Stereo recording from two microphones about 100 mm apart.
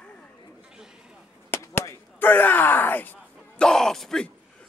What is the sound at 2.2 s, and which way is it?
Speech, 20° left (ahead or behind).